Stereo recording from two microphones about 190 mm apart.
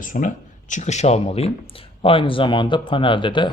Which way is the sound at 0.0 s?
45° left (ahead or behind).